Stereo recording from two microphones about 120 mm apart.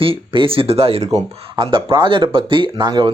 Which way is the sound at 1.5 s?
45° right (ahead or behind).